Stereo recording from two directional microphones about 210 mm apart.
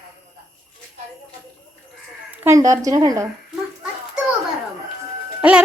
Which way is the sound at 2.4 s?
15° right (ahead or behind).